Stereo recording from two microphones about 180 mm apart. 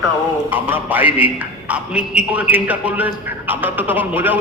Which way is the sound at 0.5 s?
10° right (ahead or behind).